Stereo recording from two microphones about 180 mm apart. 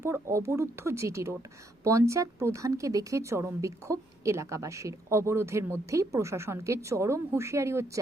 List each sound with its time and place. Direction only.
0.0 s speech: 15° right (ahead or behind)